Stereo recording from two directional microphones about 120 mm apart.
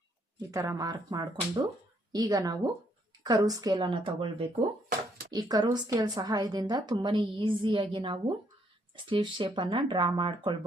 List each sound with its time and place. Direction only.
0.5 s a woman's voice: 25° right (ahead or behind); by 4.4 s 50° right (ahead or behind)
5.3 s a woman's voice: 35° right (ahead or behind)